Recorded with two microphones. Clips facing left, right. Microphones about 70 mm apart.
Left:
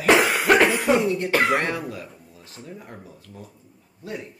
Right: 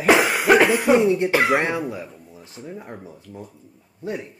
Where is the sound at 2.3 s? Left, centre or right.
Centre.